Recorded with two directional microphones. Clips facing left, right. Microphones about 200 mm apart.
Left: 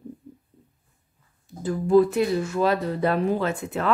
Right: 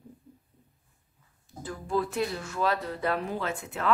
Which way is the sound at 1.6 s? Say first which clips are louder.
Left 12 dB; 15° left (ahead or behind).